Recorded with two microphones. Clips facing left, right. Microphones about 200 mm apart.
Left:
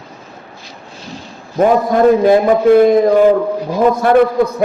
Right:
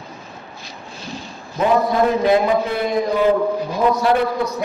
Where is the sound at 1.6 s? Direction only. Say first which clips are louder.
Left 6 dB; 55° left (ahead or behind).